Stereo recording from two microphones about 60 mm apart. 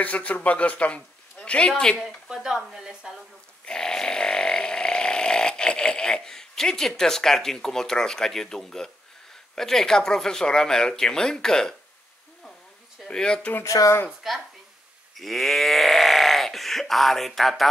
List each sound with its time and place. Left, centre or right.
0.0 s a man's voice: left
2.0 s a woman's voice: centre
3.6 s a sound: centre
7.0 s speech: centre
13.0 s speech: centre
13.7 s speech: left
14.2 s speech: centre